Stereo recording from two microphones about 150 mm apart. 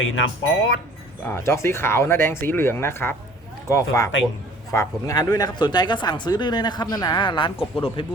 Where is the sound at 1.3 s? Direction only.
15° left (ahead or behind); by 8.1 s 35° left (ahead or behind).